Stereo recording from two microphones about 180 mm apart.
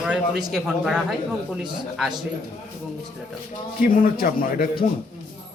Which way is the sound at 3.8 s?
55° left (ahead or behind).